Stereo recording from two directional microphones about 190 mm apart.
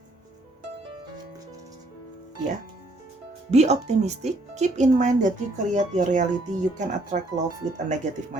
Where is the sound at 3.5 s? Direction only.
35° right (ahead or behind).